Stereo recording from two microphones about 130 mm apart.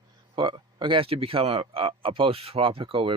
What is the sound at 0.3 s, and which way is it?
Speech, 40° right (ahead or behind).